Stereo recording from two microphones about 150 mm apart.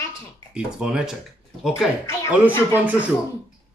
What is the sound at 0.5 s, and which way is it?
Speech, 5° right (ahead or behind).